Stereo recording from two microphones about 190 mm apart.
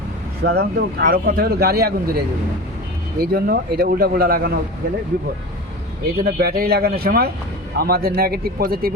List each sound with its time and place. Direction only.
0.4 s a man's voice: 60° right (ahead or behind)
6.1 s a man's voice: 55° right (ahead or behind)